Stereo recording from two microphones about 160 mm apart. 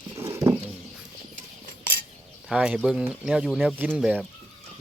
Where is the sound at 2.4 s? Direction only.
5° right (ahead or behind).